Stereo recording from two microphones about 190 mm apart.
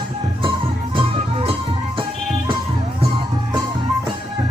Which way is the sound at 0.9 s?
30° right (ahead or behind).